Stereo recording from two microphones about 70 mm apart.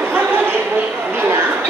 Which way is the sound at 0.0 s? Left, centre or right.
Right.